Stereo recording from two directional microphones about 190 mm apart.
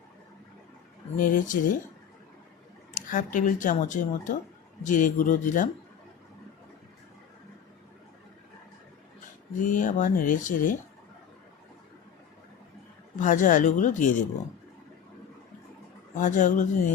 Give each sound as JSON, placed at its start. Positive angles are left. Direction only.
{"t": 1.2, "sound": "speech", "side_deg": 45}
{"t": 2.9, "sound": "speech", "side_deg": 45}
{"t": 9.6, "sound": "speech", "side_deg": 45}
{"t": 13.1, "sound": "speech", "side_deg": 40}
{"t": 16.1, "sound": "speech", "side_deg": 40}